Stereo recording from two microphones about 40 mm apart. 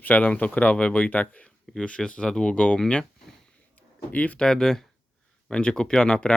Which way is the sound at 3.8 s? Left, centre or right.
Left.